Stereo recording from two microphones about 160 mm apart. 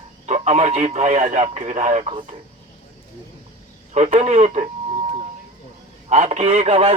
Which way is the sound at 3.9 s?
45° right (ahead or behind).